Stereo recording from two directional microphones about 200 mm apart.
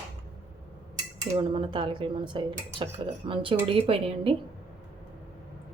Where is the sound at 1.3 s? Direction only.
25° right (ahead or behind).